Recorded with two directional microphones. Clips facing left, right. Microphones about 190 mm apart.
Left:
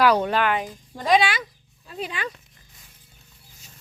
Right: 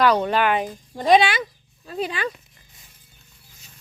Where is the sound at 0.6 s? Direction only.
25° right (ahead or behind).